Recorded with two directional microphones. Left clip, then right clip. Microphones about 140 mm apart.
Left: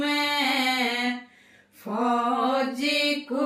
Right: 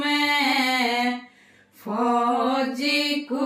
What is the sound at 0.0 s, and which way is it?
Music, 25° left (ahead or behind).